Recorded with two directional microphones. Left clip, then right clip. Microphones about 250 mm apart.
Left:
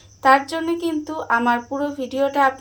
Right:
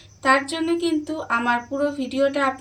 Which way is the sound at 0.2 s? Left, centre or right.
Centre.